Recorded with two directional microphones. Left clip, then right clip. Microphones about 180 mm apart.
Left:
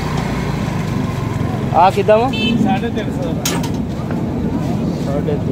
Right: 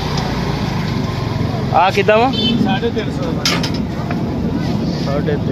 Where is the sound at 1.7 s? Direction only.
5° left (ahead or behind).